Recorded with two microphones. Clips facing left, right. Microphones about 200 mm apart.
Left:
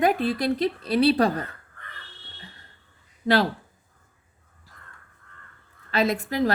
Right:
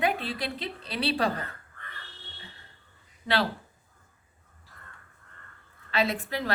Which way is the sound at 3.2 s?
45° left (ahead or behind).